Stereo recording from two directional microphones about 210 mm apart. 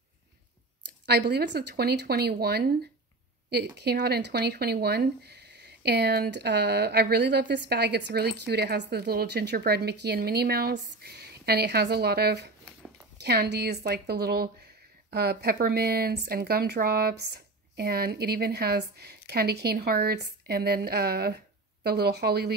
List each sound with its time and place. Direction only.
1.0 s speech: 50° right (ahead or behind)